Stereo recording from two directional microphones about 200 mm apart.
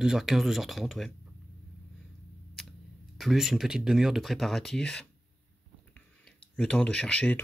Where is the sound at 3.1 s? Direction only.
Centre (ahead or behind).